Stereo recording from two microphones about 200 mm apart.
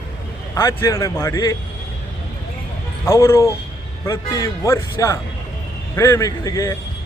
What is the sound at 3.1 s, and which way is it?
A man's voice, 15° left (ahead or behind).